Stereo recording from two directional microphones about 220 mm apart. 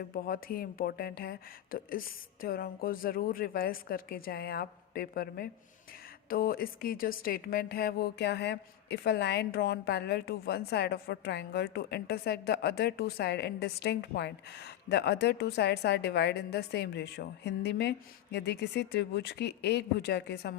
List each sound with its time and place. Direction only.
0.0 s speech: 40° left (ahead or behind)